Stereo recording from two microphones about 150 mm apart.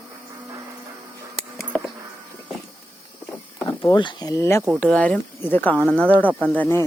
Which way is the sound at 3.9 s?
30° left (ahead or behind).